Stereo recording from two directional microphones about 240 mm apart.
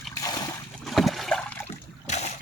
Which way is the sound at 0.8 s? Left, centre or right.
Centre.